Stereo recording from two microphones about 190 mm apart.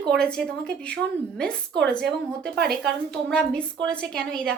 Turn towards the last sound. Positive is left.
turn(degrees=5)  # may be behind; listen again after turning